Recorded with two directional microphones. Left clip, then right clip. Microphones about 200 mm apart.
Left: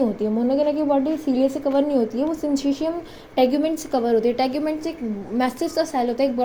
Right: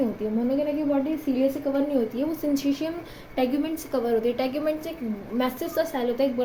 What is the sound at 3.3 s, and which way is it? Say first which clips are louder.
A woman's voice: left 7 dB; 30° left (ahead or behind).